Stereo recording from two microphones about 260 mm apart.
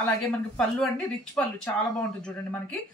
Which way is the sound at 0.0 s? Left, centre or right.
Centre.